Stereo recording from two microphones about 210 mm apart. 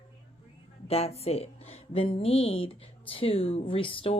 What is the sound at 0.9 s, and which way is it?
A woman's voice, 30° left (ahead or behind).